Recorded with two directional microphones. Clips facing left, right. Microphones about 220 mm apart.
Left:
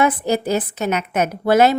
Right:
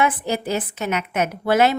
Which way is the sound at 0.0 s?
40° left (ahead or behind).